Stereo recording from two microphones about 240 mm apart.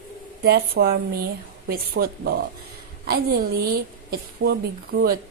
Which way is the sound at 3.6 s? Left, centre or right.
Right.